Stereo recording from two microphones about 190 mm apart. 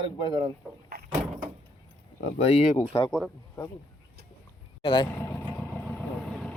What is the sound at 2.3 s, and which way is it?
Speech, 35° left (ahead or behind).